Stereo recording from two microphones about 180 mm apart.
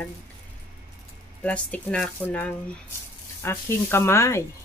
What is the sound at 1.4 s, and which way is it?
Speech, 5° left (ahead or behind).